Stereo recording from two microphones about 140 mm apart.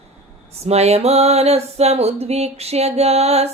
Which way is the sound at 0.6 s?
50° right (ahead or behind).